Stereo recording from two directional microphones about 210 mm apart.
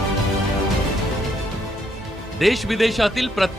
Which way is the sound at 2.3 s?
Centre (ahead or behind).